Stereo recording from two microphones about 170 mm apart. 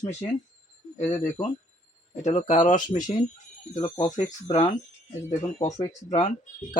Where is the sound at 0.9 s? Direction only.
40° left (ahead or behind).